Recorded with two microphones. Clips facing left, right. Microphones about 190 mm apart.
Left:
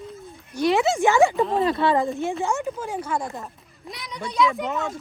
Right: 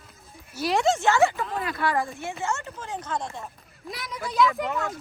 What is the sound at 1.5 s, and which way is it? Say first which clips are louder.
Speech: left 7 dB; 30° left (ahead or behind).